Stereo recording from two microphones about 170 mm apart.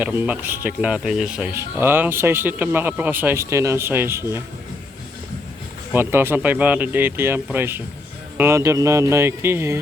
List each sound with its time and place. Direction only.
0.0 s speech: 10° right (ahead or behind)
5.9 s speech: 15° right (ahead or behind)